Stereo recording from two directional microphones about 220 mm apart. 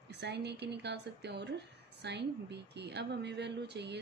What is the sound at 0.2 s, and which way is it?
A woman's voice, 50° right (ahead or behind).